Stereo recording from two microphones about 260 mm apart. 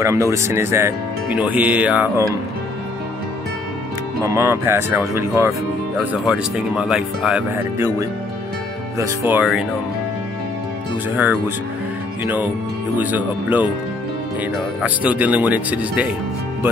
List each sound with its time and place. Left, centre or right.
0.0 s speech: centre
4.2 s speech: centre
11.1 s speech: centre
12.9 s speech: centre
14.8 s speech: centre